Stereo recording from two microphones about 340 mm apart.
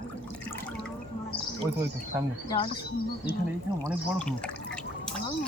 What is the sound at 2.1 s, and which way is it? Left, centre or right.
Speech, centre.